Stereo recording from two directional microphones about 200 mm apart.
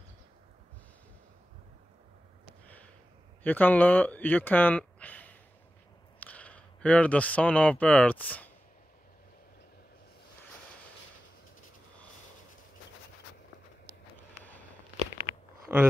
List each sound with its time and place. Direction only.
2.6 s sniff: 10° left (ahead or behind)
3.4 s speech: 10° left (ahead or behind)
15.1 s a sound: 55° right (ahead or behind)